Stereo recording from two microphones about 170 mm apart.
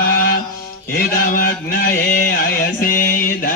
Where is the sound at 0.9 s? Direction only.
60° left (ahead or behind).